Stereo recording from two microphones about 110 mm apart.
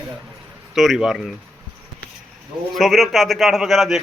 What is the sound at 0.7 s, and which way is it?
Speech, centre (ahead or behind).